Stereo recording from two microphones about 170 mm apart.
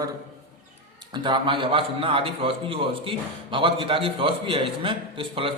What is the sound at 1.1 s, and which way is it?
A man's voice, 30° right (ahead or behind).